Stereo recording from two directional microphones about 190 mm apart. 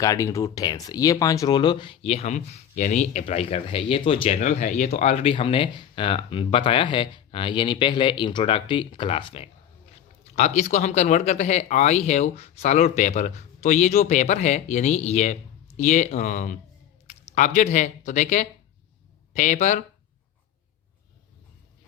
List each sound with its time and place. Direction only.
0.0 s speech: 15° left (ahead or behind); by 19.8 s 40° left (ahead or behind)